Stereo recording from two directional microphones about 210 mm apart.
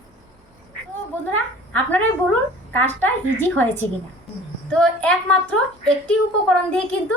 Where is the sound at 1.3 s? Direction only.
10° left (ahead or behind).